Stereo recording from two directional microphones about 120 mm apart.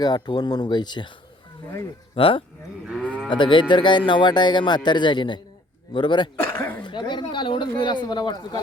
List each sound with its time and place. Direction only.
0.0 s speech: 35° left (ahead or behind)
2.1 s speech: 50° left (ahead or behind)
2.8 s livestock: 10° right (ahead or behind)
3.2 s speech: 40° left (ahead or behind)
6.4 s dog: 20° left (ahead or behind)
6.8 s speech: 40° left (ahead or behind)